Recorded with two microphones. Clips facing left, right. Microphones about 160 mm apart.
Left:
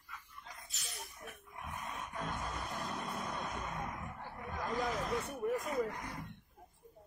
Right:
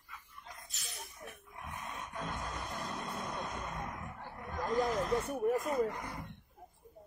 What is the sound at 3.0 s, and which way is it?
Vehicle, centre (ahead or behind).